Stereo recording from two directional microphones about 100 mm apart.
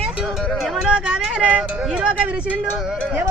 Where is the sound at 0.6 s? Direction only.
10° right (ahead or behind).